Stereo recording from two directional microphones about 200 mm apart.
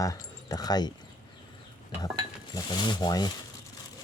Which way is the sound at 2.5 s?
20° left (ahead or behind).